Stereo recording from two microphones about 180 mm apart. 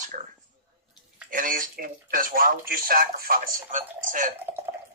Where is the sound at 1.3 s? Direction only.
50° right (ahead or behind).